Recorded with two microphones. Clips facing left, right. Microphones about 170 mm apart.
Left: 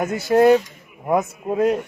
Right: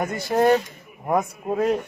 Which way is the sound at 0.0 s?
Centre (ahead or behind).